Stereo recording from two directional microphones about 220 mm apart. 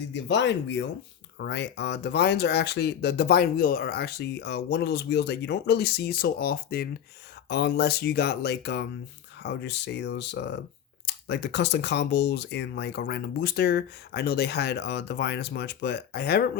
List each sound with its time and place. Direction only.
0.1 s speech: 55° left (ahead or behind)